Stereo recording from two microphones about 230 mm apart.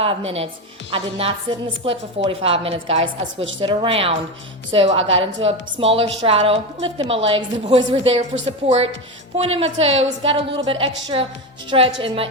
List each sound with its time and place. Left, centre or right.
0.0 s a woman's voice: right